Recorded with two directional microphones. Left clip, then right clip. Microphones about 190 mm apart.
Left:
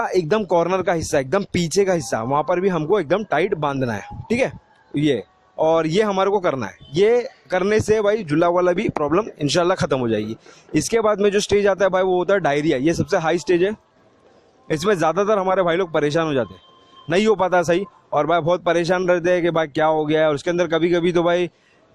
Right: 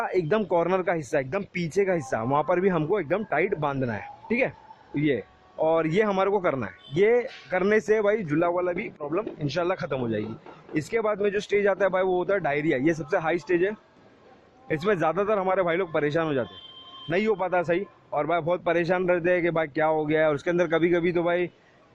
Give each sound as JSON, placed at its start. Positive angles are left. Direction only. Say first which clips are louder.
{"t": 0.0, "sound": "a man's voice", "louder": "left 5 dB", "side_deg": 40}
{"t": 3.0, "sound": "a man's voice", "louder": "left 6 dB", "side_deg": 40}